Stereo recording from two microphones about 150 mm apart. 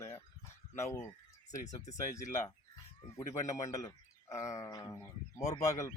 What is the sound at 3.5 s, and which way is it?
Speech, 25° left (ahead or behind).